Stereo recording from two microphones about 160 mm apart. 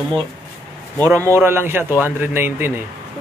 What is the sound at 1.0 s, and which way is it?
A man's voice, 20° right (ahead or behind).